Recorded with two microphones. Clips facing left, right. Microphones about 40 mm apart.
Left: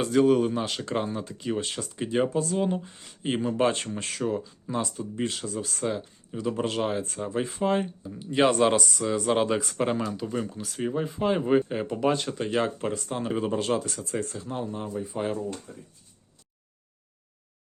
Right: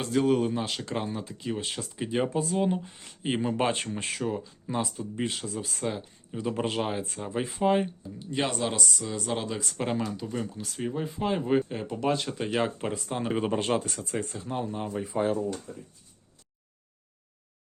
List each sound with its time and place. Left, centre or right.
0.0 s speech: centre
4.2 s speech: centre
8.0 s speech: centre
8.5 s speech: left
9.0 s speech: left
9.7 s speech: centre
13.3 s speech: right
14.3 s speech: centre